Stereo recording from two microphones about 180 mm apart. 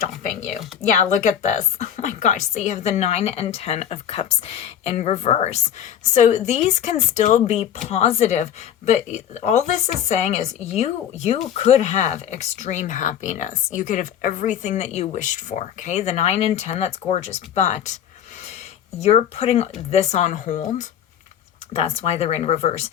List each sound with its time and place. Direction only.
0.2 s speech: 45° left (ahead or behind)
18.9 s speech: 35° left (ahead or behind)
21.7 s speech: 35° left (ahead or behind)